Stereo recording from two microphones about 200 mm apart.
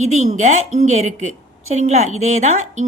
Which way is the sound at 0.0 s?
35° right (ahead or behind).